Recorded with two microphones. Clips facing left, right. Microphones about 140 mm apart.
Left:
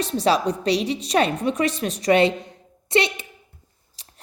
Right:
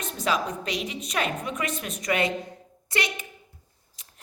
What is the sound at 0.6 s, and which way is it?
A woman's voice, 35° left (ahead or behind).